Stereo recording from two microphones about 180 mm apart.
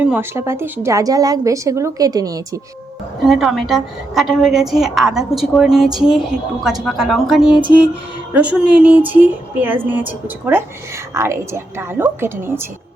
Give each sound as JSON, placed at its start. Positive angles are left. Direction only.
{"t": 0.0, "sound": "a woman's voice", "side_deg": -10}
{"t": 3.2, "sound": "a woman's voice", "side_deg": 0}